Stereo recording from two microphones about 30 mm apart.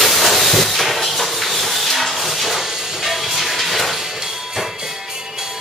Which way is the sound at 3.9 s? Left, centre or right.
Centre.